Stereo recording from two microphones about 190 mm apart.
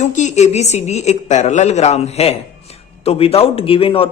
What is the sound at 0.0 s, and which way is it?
Speech, 40° left (ahead or behind).